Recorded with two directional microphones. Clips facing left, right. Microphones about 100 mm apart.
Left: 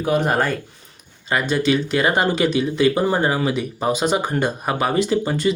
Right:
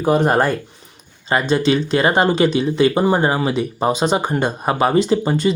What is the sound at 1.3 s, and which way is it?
Speech, 30° right (ahead or behind).